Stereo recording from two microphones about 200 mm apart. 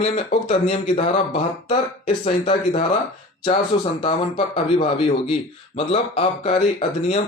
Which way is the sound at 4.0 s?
30° left (ahead or behind).